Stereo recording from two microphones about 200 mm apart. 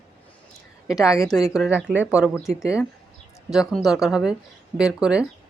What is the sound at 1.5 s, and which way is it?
Speech, 5° right (ahead or behind).